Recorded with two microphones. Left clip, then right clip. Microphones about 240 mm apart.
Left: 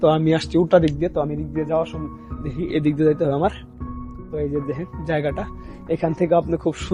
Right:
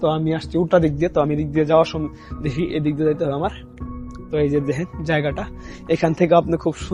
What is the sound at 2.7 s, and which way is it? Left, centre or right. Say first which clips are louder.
Speech: left 3 dB; centre.